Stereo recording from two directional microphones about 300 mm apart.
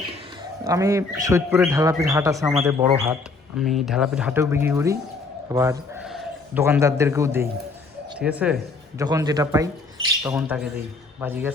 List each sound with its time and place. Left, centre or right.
0.6 s speech: centre